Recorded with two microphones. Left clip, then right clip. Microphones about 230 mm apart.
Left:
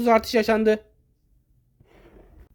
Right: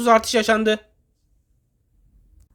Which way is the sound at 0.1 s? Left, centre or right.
Centre.